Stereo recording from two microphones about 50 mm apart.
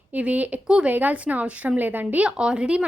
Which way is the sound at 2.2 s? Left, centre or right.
Centre.